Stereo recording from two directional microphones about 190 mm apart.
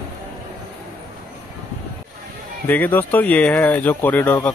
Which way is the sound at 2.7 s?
10° left (ahead or behind).